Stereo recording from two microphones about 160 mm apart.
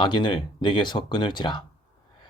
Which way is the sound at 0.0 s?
30° left (ahead or behind).